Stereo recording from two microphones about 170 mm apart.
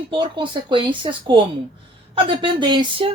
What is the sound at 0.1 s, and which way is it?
Speech, 30° right (ahead or behind).